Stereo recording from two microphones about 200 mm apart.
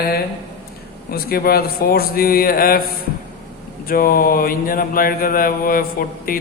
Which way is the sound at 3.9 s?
45° left (ahead or behind).